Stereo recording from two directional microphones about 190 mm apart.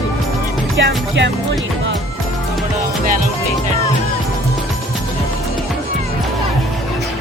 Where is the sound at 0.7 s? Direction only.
70° right (ahead or behind).